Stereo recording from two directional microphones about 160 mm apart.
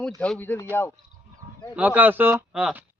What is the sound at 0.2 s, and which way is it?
Speech, 10° left (ahead or behind).